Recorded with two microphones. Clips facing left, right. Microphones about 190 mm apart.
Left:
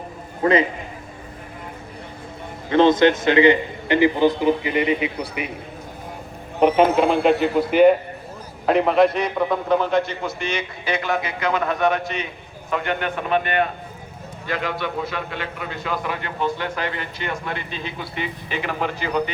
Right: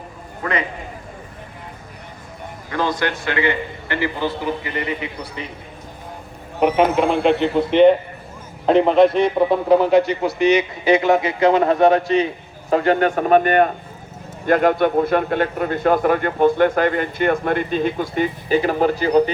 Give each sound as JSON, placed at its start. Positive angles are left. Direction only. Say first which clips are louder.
{"t": 0.4, "sound": "a man's voice", "louder": "left 7 dB", "side_deg": 25}
{"t": 2.6, "sound": "a man's voice", "louder": "left 8 dB", "side_deg": 25}
{"t": 7.1, "sound": "a man's voice", "louder": "right 1 dB", "side_deg": -20}
{"t": 10.4, "sound": "a man's voice", "louder": "right 15 dB", "side_deg": -20}